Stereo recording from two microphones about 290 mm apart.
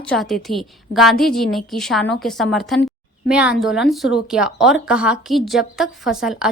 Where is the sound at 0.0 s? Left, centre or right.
Centre.